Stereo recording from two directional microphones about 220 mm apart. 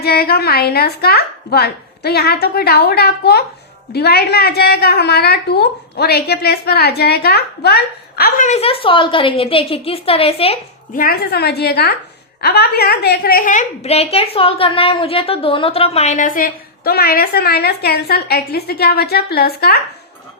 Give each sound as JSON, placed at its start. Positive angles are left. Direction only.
{"t": 0.0, "sound": "a woman's voice", "side_deg": 45}
{"t": 11.0, "sound": "a woman's voice", "side_deg": 45}